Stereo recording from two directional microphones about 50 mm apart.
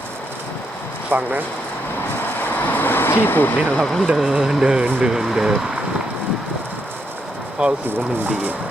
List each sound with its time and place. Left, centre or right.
1.1 s speech: right
2.6 s vehicle: left
3.8 s speech: centre
4.1 s speech: centre
7.6 s speech: centre